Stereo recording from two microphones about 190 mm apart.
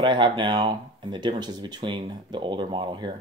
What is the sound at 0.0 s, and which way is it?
Speech, 25° right (ahead or behind).